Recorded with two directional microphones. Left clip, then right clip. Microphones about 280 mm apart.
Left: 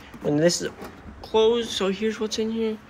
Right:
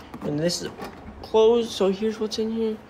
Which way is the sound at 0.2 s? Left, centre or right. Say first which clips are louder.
Left 5 dB; centre.